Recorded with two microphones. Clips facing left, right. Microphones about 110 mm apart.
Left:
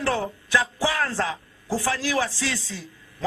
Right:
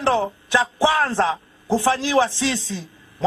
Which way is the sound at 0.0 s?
25° right (ahead or behind).